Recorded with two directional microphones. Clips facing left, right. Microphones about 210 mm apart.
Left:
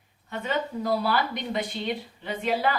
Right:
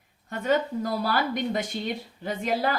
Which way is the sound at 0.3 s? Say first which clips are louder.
Right 4 dB; 45° right (ahead or behind).